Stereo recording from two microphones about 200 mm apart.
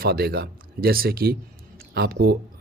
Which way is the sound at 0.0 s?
50° right (ahead or behind).